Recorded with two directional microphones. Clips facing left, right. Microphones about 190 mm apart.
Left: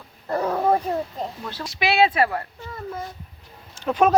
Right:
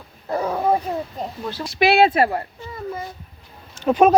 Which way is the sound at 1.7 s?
55° right (ahead or behind).